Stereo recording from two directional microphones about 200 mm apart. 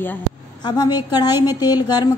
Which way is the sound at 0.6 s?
20° left (ahead or behind).